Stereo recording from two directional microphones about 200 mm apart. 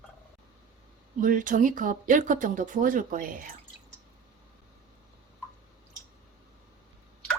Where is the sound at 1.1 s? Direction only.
40° right (ahead or behind).